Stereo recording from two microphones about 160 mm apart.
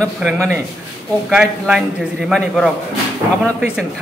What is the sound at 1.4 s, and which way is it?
Speech, 5° right (ahead or behind).